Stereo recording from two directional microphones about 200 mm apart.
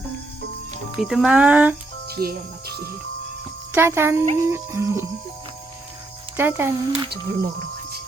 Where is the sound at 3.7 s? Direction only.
10° right (ahead or behind).